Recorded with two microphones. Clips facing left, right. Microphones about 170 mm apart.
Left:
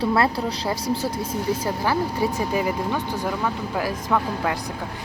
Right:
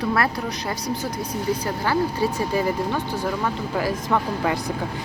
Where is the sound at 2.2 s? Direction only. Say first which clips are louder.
Right 1 dB; 15° left (ahead or behind).